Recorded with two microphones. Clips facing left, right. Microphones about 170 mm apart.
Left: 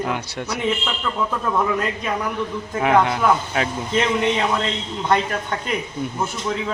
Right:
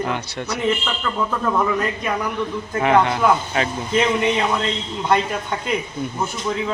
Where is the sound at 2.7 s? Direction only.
5° left (ahead or behind).